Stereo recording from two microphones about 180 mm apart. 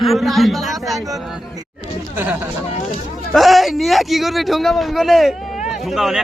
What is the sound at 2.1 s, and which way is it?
Speech, 10° right (ahead or behind).